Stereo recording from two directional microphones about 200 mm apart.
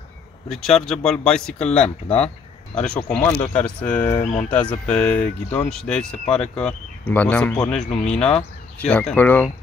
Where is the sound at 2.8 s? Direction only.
5° left (ahead or behind).